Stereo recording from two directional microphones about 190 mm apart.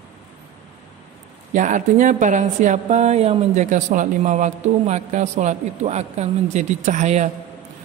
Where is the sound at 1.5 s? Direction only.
40° right (ahead or behind).